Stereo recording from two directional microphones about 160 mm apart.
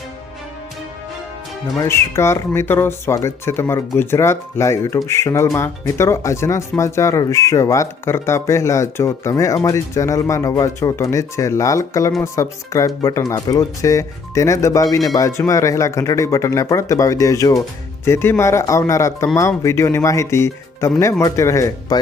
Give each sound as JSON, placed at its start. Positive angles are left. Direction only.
{"t": 1.8, "sound": "speech", "side_deg": 15}